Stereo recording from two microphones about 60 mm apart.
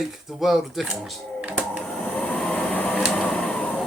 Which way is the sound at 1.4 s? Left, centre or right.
Right.